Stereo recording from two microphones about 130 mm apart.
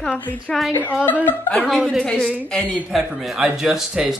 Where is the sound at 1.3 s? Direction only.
15° left (ahead or behind).